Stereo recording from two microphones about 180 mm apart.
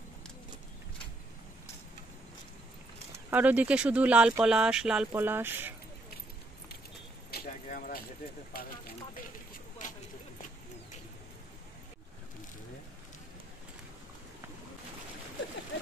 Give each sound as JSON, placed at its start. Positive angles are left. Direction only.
{"t": 3.3, "sound": "speech", "side_deg": -10}
{"t": 7.2, "sound": "keys jangling", "side_deg": 55}